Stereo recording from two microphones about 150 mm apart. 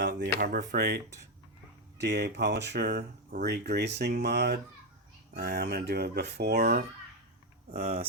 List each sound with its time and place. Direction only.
0.2 s speech: 70° right (ahead or behind); by 8.0 s 85° right